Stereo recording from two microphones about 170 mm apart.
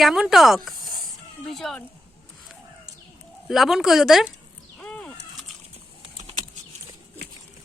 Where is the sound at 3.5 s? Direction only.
Centre (ahead or behind).